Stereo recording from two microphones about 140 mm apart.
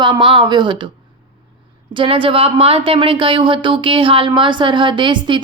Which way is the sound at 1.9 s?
40° right (ahead or behind).